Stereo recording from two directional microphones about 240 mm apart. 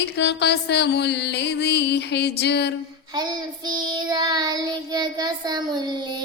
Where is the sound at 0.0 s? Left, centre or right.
Left.